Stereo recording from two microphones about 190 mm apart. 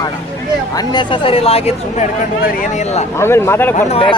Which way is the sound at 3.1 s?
15° left (ahead or behind).